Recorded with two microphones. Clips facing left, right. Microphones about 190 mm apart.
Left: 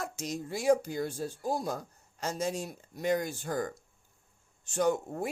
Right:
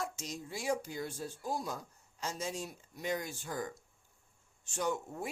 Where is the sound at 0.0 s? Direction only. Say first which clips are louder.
Left 4 dB; 65° left (ahead or behind).